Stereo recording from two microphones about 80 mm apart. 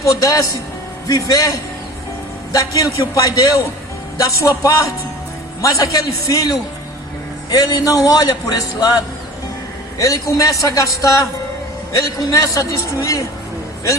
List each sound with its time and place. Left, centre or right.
0.0 s a man's voice: left
10.0 s a man's voice: left